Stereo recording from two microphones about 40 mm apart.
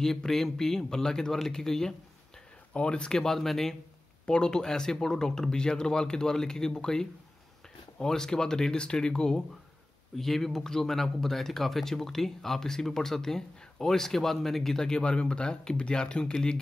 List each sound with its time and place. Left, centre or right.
0.0 s speech: centre
2.7 s speech: left
3.2 s speech: centre
4.3 s speech: centre
10.1 s speech: centre; by 16.3 s left